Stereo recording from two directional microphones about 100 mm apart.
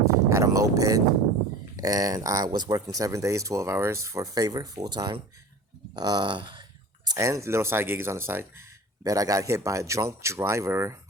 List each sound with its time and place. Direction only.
0.3 s a sound: 30° right (ahead or behind)
1.7 s speech: 40° right (ahead or behind)
9.0 s speech: 35° right (ahead or behind)